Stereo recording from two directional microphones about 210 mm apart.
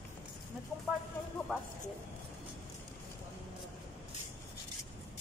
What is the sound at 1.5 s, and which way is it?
Speech, centre (ahead or behind).